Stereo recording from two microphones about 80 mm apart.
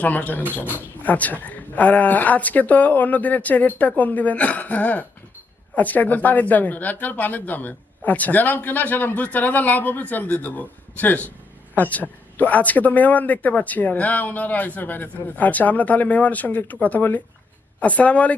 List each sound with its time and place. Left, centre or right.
0.0 s speech: centre